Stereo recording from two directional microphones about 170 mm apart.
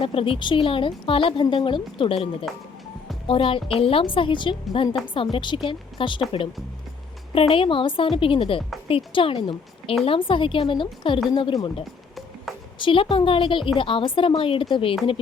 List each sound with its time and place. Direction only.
0.0 s a woman's voice: 35° left (ahead or behind)
2.5 s speech: centre (ahead or behind)
3.2 s a woman's voice: 30° left (ahead or behind)
7.3 s a woman's voice: 30° left (ahead or behind)
12.5 s music: centre (ahead or behind)
12.8 s a woman's voice: 30° left (ahead or behind)